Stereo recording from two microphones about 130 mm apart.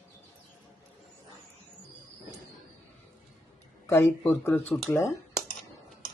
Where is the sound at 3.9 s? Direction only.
15° left (ahead or behind).